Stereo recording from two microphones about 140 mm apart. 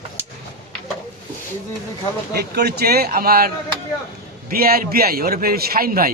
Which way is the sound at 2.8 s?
90° right.